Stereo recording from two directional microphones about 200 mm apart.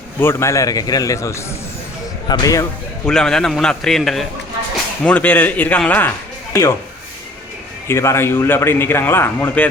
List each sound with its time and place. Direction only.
0.2 s speech: 10° left (ahead or behind)
3.1 s a man's voice: 5° left (ahead or behind)
7.9 s speech: 15° left (ahead or behind)